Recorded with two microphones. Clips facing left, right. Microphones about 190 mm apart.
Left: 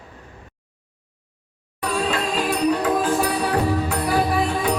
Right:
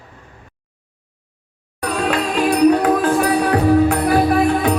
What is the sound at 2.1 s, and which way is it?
Music, 65° right (ahead or behind).